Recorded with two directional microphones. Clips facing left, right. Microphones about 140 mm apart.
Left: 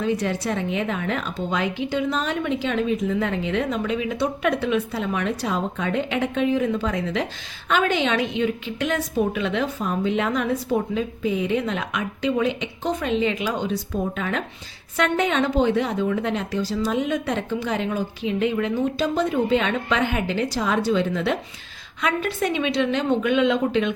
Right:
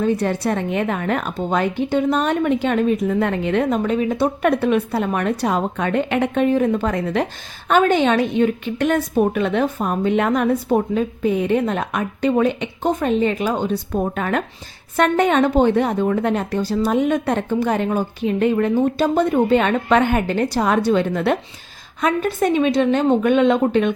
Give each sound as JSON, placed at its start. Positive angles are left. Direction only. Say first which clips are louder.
{"t": 0.0, "sound": "a woman's voice", "louder": "right 4 dB", "side_deg": -55}
{"t": 22.0, "sound": "a woman's voice", "louder": "right 5 dB", "side_deg": -45}